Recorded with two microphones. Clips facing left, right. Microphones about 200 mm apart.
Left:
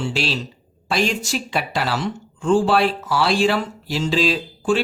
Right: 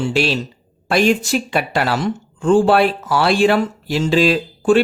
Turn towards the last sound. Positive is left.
turn(degrees=-55)  # may be behind; listen again after turning